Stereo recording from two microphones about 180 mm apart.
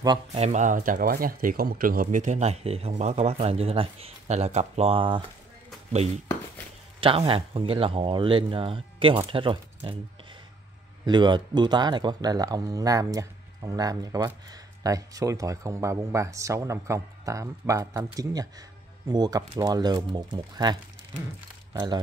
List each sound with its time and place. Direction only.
0.3 s speech: 40° right (ahead or behind)
7.0 s speech: 30° right (ahead or behind)
11.1 s speech: 25° right (ahead or behind)